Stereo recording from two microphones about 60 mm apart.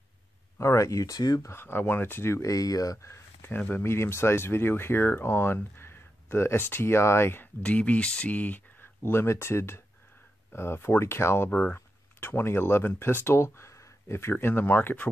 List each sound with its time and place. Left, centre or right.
0.6 s speech: left
1.5 s speech: left
2.4 s speech: left
3.4 s speech: left
3.8 s speech: left
7.6 s speech: left
11.5 s speech: left